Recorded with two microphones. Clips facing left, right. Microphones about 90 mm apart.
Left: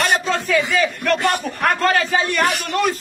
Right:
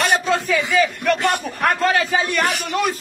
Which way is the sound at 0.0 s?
Centre (ahead or behind).